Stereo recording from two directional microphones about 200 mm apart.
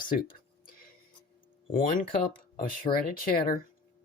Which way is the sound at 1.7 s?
45° left (ahead or behind).